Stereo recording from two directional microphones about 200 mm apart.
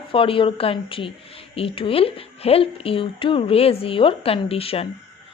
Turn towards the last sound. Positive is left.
turn(degrees=30)  # may be behind; listen again after turning